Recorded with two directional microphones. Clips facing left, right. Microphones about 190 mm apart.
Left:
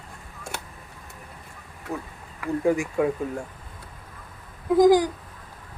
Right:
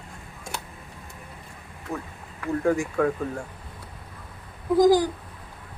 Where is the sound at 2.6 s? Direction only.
15° left (ahead or behind).